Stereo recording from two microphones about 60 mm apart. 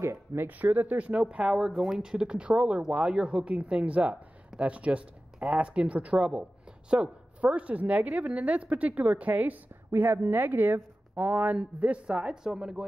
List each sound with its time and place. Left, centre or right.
0.0 s speech: right
0.5 s a woman's voice: right
1.5 s a woman's voice: centre